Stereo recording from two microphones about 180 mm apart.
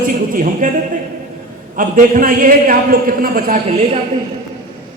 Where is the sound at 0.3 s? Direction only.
50° right (ahead or behind).